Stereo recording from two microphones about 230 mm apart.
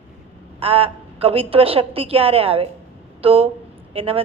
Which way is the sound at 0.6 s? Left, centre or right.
Right.